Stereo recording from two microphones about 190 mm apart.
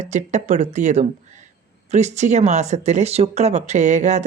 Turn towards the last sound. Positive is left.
turn(degrees=-40)  # may be behind; listen again after turning